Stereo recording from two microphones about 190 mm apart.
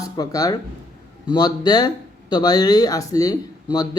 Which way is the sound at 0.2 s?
20° left (ahead or behind).